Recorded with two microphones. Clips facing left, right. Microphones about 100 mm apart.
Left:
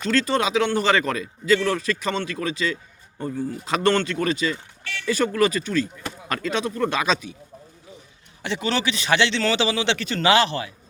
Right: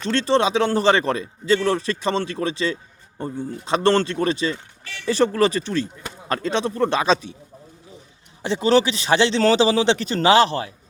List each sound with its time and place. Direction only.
0.0 s a man's voice: 30° right (ahead or behind)
8.4 s a man's voice: 30° right (ahead or behind)